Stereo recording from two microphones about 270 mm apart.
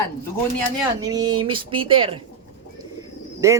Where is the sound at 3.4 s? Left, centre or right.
Centre.